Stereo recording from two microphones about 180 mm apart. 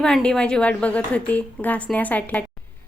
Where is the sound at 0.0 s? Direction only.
5° left (ahead or behind).